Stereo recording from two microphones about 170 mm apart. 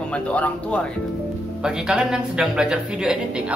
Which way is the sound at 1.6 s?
5° right (ahead or behind).